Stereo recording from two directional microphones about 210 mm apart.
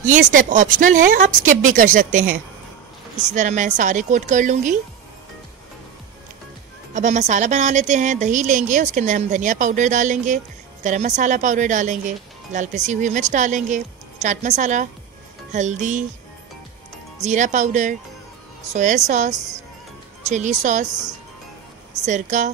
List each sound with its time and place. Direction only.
0.3 s a woman's voice: 40° right (ahead or behind)
3.3 s a woman's voice: 35° right (ahead or behind)
6.9 s a woman's voice: 35° right (ahead or behind)
17.2 s a woman's voice: 35° right (ahead or behind)
22.0 s a woman's voice: 35° right (ahead or behind)